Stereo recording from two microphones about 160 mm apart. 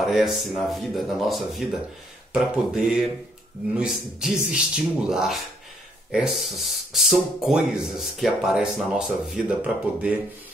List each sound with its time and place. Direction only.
0.0 s speech: centre (ahead or behind)